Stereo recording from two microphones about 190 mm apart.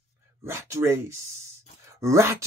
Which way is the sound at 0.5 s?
15° right (ahead or behind).